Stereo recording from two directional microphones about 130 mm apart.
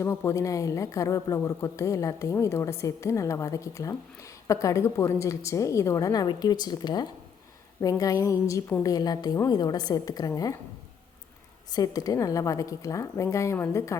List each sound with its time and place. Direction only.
0.0 s a woman's voice: 20° left (ahead or behind)
11.7 s a woman's voice: 30° left (ahead or behind)